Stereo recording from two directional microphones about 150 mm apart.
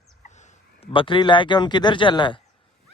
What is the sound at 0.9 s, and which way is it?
Speech, 35° left (ahead or behind).